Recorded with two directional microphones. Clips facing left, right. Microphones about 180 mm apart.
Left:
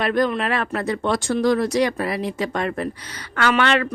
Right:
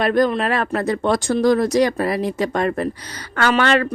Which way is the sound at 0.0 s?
40° right (ahead or behind).